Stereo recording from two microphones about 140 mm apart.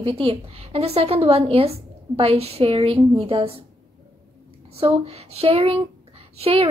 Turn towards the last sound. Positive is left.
turn(degrees=-45)  # may be behind; listen again after turning